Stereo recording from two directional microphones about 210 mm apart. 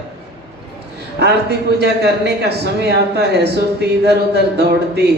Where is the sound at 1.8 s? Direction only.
55° right (ahead or behind).